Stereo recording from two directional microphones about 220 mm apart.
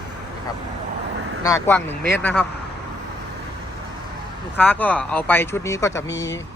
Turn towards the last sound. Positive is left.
turn(degrees=15)  # may be behind; listen again after turning